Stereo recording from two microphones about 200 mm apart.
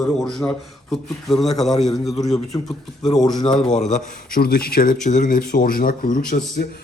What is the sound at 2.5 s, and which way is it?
Speech, 20° left (ahead or behind).